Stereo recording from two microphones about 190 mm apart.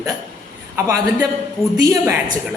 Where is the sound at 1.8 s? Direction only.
15° right (ahead or behind).